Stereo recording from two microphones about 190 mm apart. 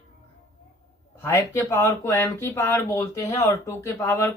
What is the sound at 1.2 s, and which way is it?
Speech, 15° left (ahead or behind).